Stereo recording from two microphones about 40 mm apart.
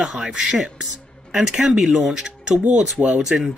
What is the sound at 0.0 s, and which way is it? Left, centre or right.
Speech, centre.